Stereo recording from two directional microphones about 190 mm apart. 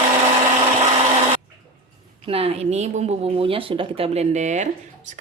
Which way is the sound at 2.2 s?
30° right (ahead or behind).